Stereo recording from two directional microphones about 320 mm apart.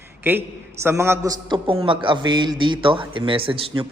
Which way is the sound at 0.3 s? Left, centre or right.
Centre.